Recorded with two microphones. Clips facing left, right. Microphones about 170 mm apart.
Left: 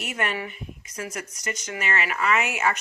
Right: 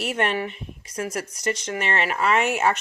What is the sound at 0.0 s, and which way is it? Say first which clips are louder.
Speech: right 5 dB; 35° right (ahead or behind).